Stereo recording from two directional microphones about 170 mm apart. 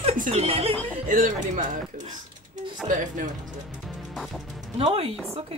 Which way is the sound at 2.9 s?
50° right (ahead or behind).